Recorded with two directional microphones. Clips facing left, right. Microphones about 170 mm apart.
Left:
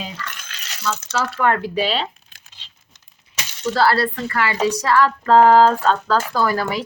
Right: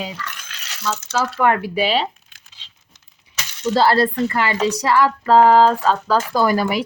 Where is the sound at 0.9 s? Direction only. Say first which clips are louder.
Right 1 dB; 15° right (ahead or behind).